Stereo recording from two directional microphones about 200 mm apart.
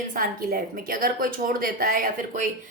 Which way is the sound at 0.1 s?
45° right (ahead or behind).